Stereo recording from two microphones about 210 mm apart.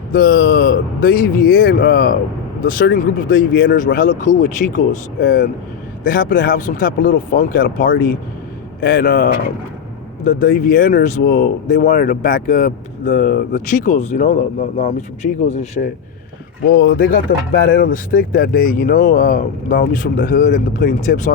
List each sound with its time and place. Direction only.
0.1 s speech: 45° left (ahead or behind)
16.6 s speech: 50° left (ahead or behind)